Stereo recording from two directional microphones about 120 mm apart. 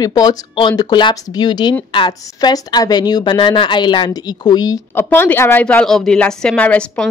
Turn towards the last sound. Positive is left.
turn(degrees=10)  # may be behind; listen again after turning